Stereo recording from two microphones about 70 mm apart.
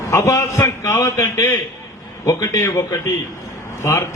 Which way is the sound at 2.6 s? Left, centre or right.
Left.